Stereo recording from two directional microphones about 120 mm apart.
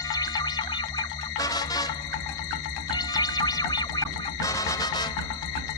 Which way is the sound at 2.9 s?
35° left (ahead or behind).